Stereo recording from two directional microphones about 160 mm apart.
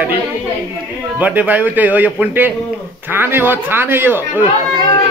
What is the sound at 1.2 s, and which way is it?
Speech, 10° right (ahead or behind).